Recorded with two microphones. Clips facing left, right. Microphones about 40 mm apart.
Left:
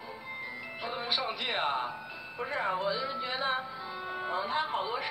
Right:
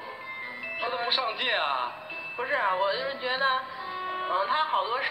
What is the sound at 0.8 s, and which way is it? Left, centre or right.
Speech, right.